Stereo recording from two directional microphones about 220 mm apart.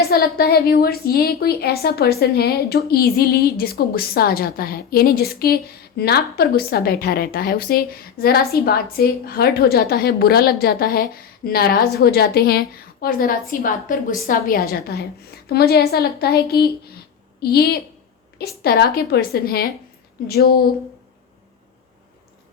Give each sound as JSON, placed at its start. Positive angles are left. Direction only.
{"t": 0.0, "sound": "a woman's voice", "side_deg": 45}